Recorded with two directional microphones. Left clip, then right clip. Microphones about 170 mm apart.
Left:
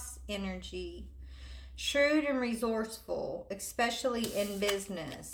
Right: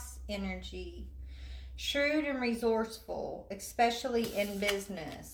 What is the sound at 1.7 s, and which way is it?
Speech, 45° left (ahead or behind).